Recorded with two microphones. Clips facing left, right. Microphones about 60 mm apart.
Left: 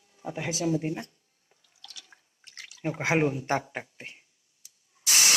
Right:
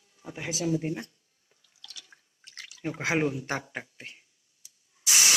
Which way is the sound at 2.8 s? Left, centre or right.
Left.